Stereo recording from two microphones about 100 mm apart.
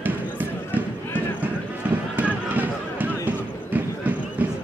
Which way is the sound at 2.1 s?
20° right (ahead or behind).